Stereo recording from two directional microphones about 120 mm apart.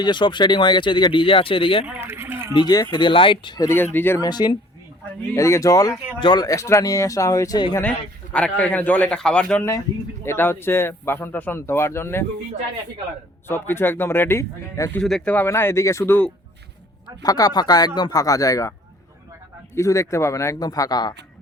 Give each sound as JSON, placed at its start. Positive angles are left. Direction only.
{"t": 0.0, "sound": "speech", "side_deg": 40}
{"t": 1.8, "sound": "speech", "side_deg": -10}
{"t": 2.0, "sound": "a sound", "side_deg": -20}
{"t": 2.5, "sound": "speech", "side_deg": 35}
{"t": 3.6, "sound": "a man's voice", "side_deg": 20}
{"t": 4.2, "sound": "speech", "side_deg": 35}
{"t": 5.3, "sound": "speech", "side_deg": 25}
{"t": 6.1, "sound": "speech", "side_deg": 40}
{"t": 7.8, "sound": "a man's voice", "side_deg": 10}
{"t": 10.2, "sound": "speech", "side_deg": 20}
{"t": 13.5, "sound": "speech", "side_deg": 20}
{"t": 15.0, "sound": "speech", "side_deg": 5}
{"t": 17.2, "sound": "speech", "side_deg": 30}
{"t": 19.7, "sound": "speech", "side_deg": 25}